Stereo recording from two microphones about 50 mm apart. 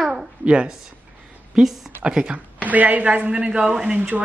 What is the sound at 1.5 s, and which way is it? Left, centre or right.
Speech, centre.